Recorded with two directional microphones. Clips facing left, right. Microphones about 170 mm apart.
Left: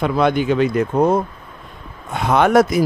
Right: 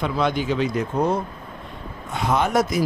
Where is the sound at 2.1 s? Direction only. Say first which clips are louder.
Left 7 dB; 65° left (ahead or behind).